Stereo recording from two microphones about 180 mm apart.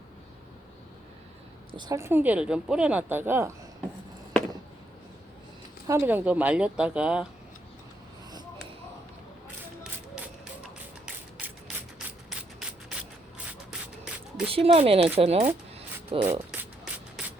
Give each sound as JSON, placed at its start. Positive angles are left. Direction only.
{"t": 1.7, "sound": "a woman's voice", "side_deg": -20}
{"t": 5.9, "sound": "a woman's voice", "side_deg": -10}
{"t": 10.6, "sound": "music", "side_deg": -5}
{"t": 13.7, "sound": "beatboxing", "side_deg": 0}
{"t": 14.4, "sound": "speech", "side_deg": -30}
{"t": 16.5, "sound": "a sound", "side_deg": -5}